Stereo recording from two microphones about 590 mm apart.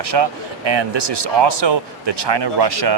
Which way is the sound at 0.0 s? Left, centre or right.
Right.